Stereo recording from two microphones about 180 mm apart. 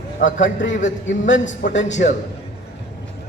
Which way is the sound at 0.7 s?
45° left (ahead or behind).